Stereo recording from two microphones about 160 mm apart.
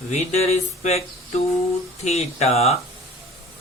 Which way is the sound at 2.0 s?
40° left (ahead or behind).